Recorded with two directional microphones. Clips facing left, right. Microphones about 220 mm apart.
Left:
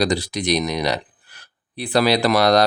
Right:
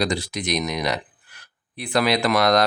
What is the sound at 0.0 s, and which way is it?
Speech, 35° left (ahead or behind).